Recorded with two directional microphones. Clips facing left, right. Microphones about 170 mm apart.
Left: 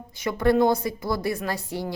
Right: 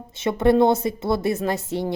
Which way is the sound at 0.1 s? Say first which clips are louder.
Right 3 dB; 25° right (ahead or behind).